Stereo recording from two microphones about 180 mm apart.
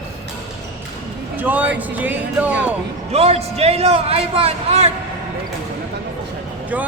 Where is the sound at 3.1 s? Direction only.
35° right (ahead or behind).